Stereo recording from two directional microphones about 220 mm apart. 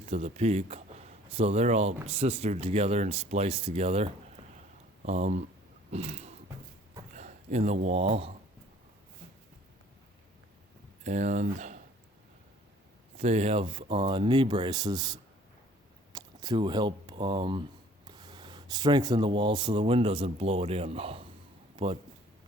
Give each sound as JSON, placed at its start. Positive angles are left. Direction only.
{"t": 0.0, "sound": "speech", "side_deg": -30}
{"t": 5.9, "sound": "a sound", "side_deg": -30}
{"t": 7.1, "sound": "speech", "side_deg": -35}
{"t": 11.0, "sound": "speech", "side_deg": -35}
{"t": 13.1, "sound": "speech", "side_deg": -30}